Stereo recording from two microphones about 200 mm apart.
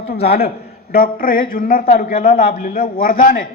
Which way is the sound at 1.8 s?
30° left (ahead or behind).